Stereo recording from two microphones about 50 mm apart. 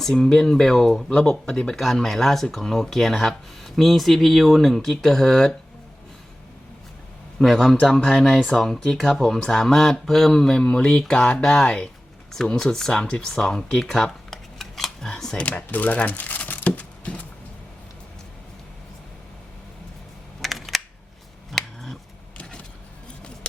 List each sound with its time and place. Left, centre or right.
0.1 s speech: centre
7.3 s speech: centre
15.4 s crumpling: left
20.4 s camera: centre
21.5 s finger snapping: centre